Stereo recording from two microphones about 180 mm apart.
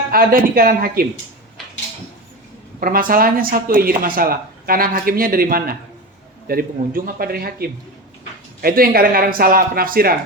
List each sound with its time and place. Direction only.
0.1 s speech: 50° right (ahead or behind)
2.8 s speech: 50° right (ahead or behind)